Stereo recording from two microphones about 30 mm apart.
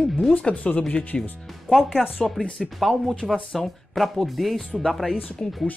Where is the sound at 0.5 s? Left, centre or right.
Left.